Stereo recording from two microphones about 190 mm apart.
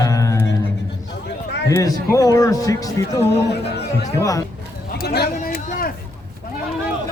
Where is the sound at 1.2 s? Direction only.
65° left (ahead or behind).